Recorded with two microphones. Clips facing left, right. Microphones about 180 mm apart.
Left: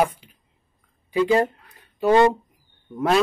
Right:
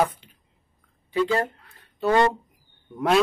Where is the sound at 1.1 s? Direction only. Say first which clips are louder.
Left 4 dB; 15° left (ahead or behind).